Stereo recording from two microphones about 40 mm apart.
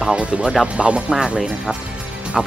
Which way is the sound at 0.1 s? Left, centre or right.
Right.